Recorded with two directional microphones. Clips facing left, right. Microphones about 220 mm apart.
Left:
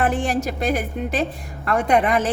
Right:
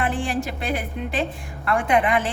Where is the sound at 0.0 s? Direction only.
45° left (ahead or behind).